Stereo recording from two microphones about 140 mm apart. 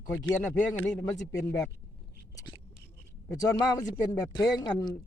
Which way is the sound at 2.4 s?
35° left (ahead or behind).